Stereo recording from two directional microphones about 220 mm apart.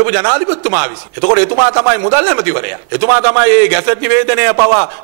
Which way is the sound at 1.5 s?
25° right (ahead or behind).